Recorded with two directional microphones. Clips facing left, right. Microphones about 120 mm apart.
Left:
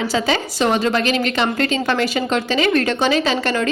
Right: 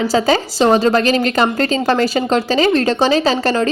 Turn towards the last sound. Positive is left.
turn(degrees=-35)  # may be behind; listen again after turning